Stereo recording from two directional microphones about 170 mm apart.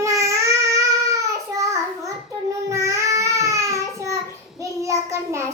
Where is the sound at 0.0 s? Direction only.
20° right (ahead or behind).